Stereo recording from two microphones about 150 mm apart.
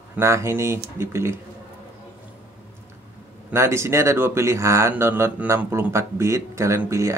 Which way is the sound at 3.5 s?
15° right (ahead or behind).